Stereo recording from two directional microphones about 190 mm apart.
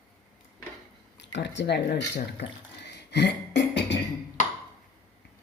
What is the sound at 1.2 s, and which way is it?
Speech, 65° left (ahead or behind).